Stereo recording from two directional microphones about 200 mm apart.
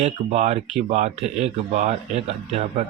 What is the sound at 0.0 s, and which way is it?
Speech, 35° right (ahead or behind).